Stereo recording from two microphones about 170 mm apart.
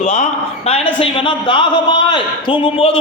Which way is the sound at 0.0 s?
45° left (ahead or behind).